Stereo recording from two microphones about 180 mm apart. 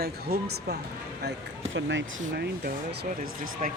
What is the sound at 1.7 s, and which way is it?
Speech, 90° right.